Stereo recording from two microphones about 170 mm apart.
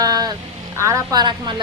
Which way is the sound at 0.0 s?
20° right (ahead or behind).